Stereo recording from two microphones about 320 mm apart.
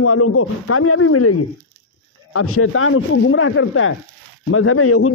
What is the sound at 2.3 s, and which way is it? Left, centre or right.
Speech, left.